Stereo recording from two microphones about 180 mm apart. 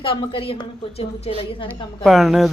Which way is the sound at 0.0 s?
30° left (ahead or behind).